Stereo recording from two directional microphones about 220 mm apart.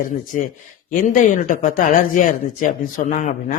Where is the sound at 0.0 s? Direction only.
40° left (ahead or behind).